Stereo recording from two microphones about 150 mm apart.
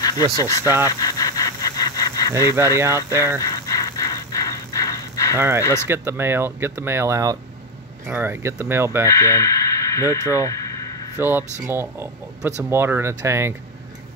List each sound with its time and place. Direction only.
0.0 s speech: 25° left (ahead or behind)
0.8 s a sound: 25° left (ahead or behind)
2.6 s speech: 15° right (ahead or behind)
3.3 s a sound: 25° left (ahead or behind)
5.6 s speech: 20° left (ahead or behind)
5.9 s speech: 15° right (ahead or behind)
9.0 s speech: 20° left (ahead or behind)
10.0 s speech: 20° right (ahead or behind)